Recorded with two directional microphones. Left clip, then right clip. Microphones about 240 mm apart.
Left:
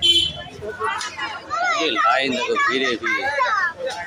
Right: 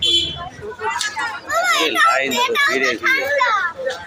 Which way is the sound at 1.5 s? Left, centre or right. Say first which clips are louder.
Right 4 dB; right.